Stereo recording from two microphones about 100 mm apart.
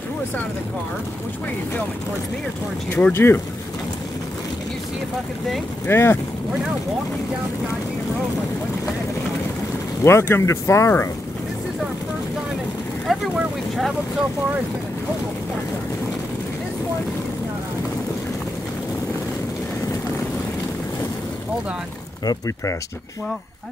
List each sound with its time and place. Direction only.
2.9 s speech: 20° left (ahead or behind)
5.9 s speech: 25° left (ahead or behind)
10.0 s speech: 25° left (ahead or behind)
13.0 s vehicle: centre (ahead or behind)